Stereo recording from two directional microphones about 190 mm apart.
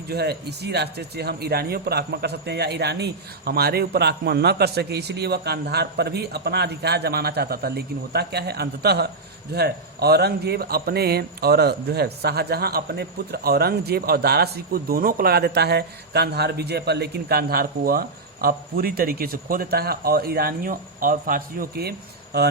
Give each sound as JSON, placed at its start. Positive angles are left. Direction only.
{"t": 0.1, "sound": "a man's voice", "side_deg": -60}